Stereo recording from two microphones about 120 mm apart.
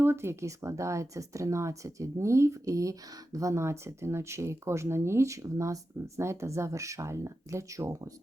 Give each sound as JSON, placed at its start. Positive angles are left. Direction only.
{"t": 0.0, "sound": "speech", "side_deg": -20}